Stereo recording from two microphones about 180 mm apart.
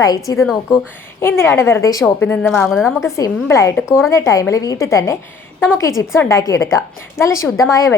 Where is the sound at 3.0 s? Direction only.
15° left (ahead or behind).